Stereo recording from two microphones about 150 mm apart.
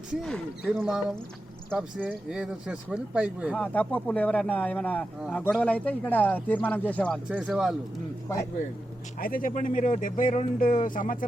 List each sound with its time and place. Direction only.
0.1 s speech: 5° left (ahead or behind)
3.5 s speech: 10° left (ahead or behind)
7.3 s speech: 5° right (ahead or behind)
9.2 s speech: 70° left (ahead or behind)